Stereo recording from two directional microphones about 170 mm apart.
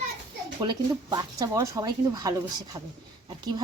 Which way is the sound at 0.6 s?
25° right (ahead or behind).